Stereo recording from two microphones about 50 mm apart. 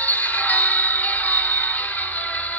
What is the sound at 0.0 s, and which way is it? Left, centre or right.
Music, left.